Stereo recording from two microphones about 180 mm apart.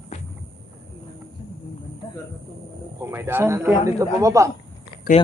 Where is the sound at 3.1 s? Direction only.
15° right (ahead or behind).